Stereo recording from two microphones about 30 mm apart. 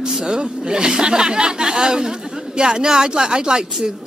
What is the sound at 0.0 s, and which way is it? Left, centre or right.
Speech, right.